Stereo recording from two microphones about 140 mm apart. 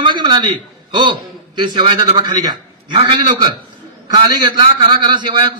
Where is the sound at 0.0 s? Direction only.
35° right (ahead or behind).